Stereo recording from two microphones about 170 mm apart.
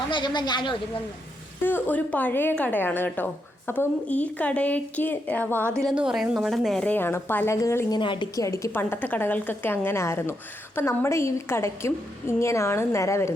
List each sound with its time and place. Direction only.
0.1 s speech: 25° left (ahead or behind)
1.6 s a woman's voice: 10° left (ahead or behind)
5.7 s a woman's voice: centre (ahead or behind); by 7.9 s 15° left (ahead or behind)
7.9 s speech: 30° left (ahead or behind)
8.4 s a woman's voice: 15° left (ahead or behind)